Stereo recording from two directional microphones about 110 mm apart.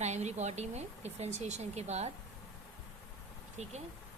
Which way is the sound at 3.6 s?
90° right.